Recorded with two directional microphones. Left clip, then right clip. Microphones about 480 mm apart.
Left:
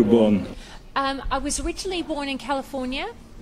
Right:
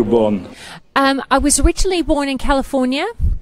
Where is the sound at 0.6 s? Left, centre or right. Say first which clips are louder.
Right 9 dB; right.